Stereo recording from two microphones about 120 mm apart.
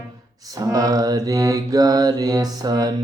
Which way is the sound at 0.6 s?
30° right (ahead or behind).